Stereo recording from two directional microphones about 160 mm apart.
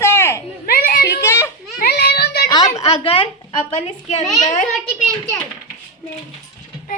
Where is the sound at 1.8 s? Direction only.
85° left.